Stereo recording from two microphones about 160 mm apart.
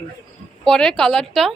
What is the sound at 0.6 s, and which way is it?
Speech, 5° left (ahead or behind).